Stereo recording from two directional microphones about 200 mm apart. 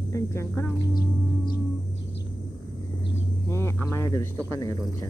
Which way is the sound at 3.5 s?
15° left (ahead or behind).